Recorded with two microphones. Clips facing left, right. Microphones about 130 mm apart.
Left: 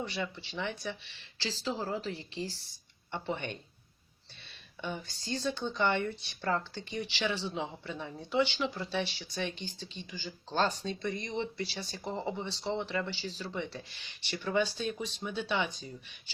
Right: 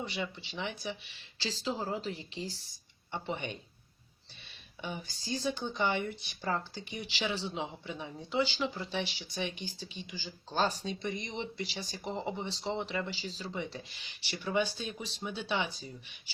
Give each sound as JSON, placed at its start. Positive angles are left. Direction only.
{"t": 0.1, "sound": "speech", "side_deg": -15}
{"t": 4.8, "sound": "speech", "side_deg": -10}